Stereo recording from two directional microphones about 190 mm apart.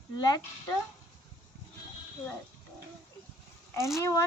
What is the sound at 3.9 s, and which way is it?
Speech, 15° left (ahead or behind).